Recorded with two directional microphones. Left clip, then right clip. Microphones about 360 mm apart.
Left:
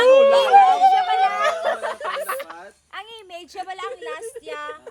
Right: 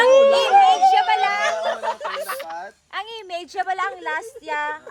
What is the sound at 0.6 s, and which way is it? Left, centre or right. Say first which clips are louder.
Chatter: even; left.